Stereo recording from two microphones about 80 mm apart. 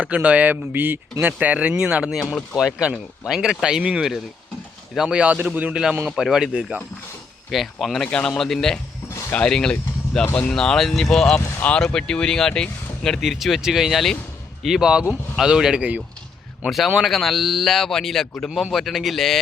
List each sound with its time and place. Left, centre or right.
0.0 s speech: centre
5.7 s speech: centre
7.5 s a man's voice: centre
11.3 s speech: centre
16.6 s a man's voice: centre